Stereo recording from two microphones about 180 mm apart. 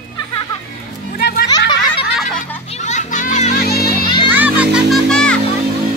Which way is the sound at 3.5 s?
55° left (ahead or behind).